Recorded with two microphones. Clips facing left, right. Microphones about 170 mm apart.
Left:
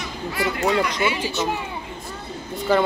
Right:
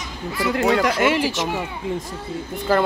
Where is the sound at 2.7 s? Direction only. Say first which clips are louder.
Even; 5° right (ahead or behind).